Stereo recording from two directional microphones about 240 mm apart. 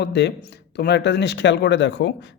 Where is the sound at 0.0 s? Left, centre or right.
Left.